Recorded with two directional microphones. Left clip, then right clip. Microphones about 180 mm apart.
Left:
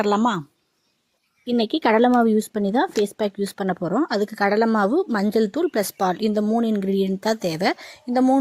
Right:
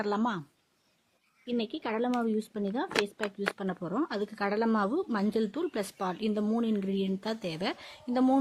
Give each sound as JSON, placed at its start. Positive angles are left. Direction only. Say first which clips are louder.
{"t": 0.0, "sound": "a woman's voice", "louder": "left 11 dB", "side_deg": 40}
{"t": 1.5, "sound": "a woman's voice", "louder": "left 14 dB", "side_deg": 45}